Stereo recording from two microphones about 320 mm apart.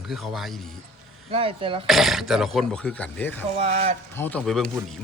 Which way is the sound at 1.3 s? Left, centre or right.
Centre.